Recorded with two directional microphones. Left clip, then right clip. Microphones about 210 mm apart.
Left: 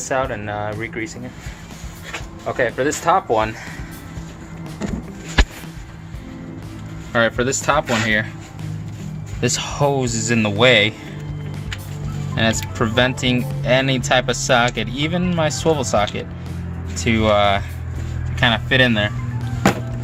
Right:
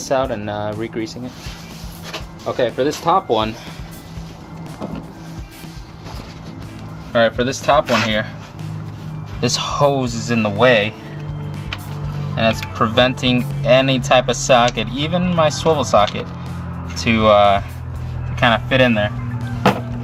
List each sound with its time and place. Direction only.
0.1 s speech: 50° right (ahead or behind)
2.5 s speech: 35° right (ahead or behind)
7.1 s speech: 5° left (ahead or behind)
9.6 s speech: centre (ahead or behind)
10.2 s speech: 15° left (ahead or behind)
12.3 s speech: 15° left (ahead or behind)
12.9 s speech: centre (ahead or behind)